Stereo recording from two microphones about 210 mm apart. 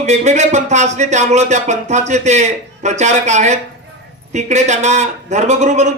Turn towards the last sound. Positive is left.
turn(degrees=-35)  # may be behind; listen again after turning